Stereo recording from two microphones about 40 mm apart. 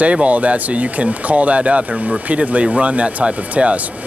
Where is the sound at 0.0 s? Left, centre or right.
Right.